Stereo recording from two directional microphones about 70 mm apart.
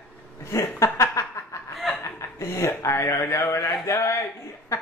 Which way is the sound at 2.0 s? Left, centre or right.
Left.